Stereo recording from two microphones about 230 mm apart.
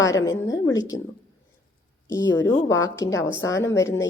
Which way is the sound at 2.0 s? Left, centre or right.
Centre.